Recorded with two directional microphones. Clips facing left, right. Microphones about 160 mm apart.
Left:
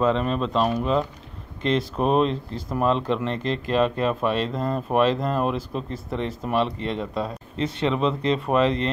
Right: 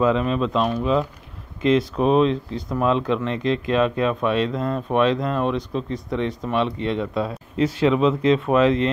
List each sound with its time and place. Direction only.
0.0 s speech: centre (ahead or behind)